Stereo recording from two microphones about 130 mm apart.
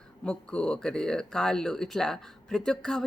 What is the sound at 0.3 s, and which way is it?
Speech, 5° left (ahead or behind).